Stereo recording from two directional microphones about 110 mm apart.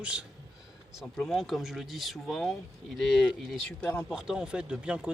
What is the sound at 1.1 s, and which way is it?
Speech, centre (ahead or behind).